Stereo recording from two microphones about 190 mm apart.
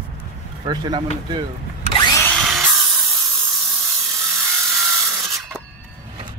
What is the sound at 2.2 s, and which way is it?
Drill, 5° left (ahead or behind).